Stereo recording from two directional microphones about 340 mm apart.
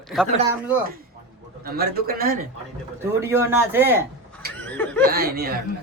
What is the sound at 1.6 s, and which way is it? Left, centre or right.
Speech, right.